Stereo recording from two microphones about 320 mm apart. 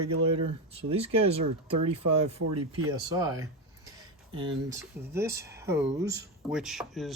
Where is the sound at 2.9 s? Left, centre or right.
Centre.